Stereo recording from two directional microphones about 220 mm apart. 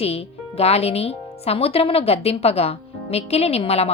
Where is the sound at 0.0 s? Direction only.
25° left (ahead or behind).